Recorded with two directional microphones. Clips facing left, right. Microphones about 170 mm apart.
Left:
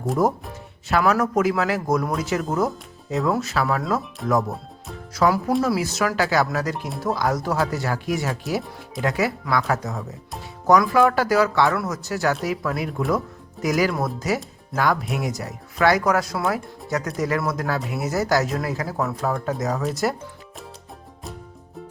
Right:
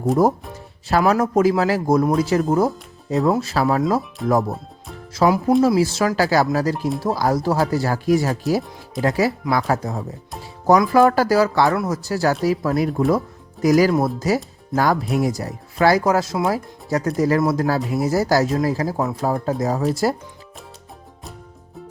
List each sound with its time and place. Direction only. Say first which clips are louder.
0.9 s speech: right 3 dB; 35° right (ahead or behind)
5.1 s speech: right 4 dB; 25° right (ahead or behind)